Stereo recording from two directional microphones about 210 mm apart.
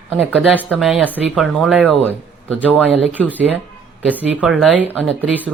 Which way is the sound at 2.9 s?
5° right (ahead or behind).